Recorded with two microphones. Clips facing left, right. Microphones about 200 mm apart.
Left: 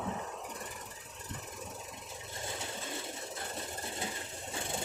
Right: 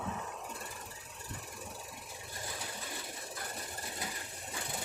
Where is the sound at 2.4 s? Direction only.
25° left (ahead or behind).